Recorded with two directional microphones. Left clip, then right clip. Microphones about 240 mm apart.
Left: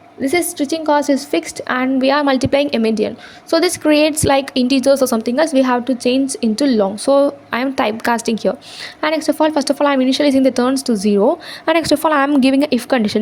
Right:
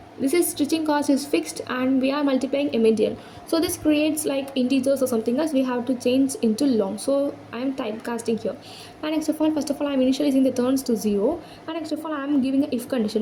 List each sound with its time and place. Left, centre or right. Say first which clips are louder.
0.2 s a woman's voice: left 5 dB; left
11.6 s a woman's voice: left 18 dB; left